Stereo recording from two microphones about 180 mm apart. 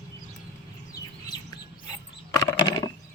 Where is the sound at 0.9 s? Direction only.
20° left (ahead or behind).